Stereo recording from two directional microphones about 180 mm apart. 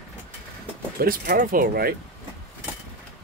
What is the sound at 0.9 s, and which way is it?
Speech, 50° right (ahead or behind).